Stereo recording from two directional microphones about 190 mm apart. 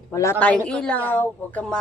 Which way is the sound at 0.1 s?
15° left (ahead or behind).